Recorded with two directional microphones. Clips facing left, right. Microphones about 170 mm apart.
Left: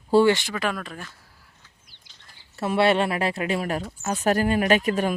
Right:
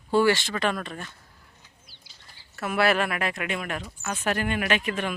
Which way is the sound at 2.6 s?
30° left (ahead or behind).